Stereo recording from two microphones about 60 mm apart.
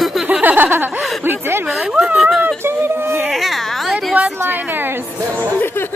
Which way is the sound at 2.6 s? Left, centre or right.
Right.